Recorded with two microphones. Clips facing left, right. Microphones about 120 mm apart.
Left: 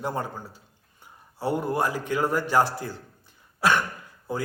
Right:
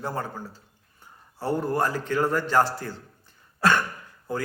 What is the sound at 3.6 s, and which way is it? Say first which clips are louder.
Cough: right 1 dB; 15° left (ahead or behind).